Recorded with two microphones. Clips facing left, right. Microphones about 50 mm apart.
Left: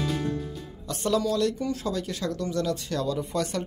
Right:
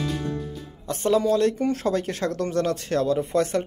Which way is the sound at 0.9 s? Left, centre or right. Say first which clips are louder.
Right 5 dB; right.